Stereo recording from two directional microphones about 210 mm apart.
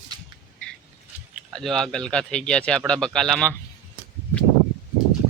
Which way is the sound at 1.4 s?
Centre (ahead or behind).